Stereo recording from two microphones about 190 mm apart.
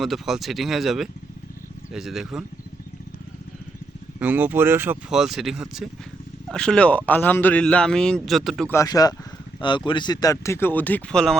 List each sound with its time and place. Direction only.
0.0 s a man's voice: centre (ahead or behind)
4.2 s a man's voice: 10° right (ahead or behind)
8.7 s speech: 15° left (ahead or behind)